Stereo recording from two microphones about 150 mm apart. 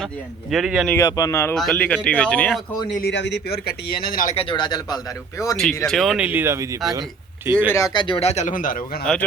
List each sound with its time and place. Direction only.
0.5 s speech: centre (ahead or behind)
1.0 s speech: 25° left (ahead or behind)
1.5 s speech: 5° left (ahead or behind)
3.5 s speech: 90° left; by 4.4 s 70° left (ahead or behind)
4.4 s speech: 30° left (ahead or behind)
5.5 s speech: 5° left (ahead or behind); by 7.7 s 10° right (ahead or behind)
7.7 s speech: 20° left (ahead or behind)
8.0 s speech: 40° left (ahead or behind); by 8.8 s 65° left (ahead or behind)
9.1 s speech: 5° left (ahead or behind)